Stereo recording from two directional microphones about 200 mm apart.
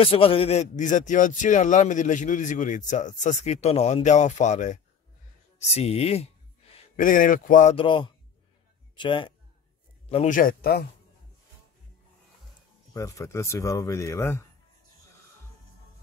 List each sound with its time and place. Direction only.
0.0 s a man's voice: 30° left (ahead or behind)
7.7 s a man's voice: 25° left (ahead or behind)
10.0 s speech: 35° left (ahead or behind); by 10.9 s 50° left (ahead or behind)
12.9 s speech: 15° left (ahead or behind)